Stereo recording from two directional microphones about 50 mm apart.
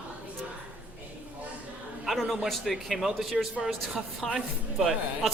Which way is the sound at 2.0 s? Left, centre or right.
Centre.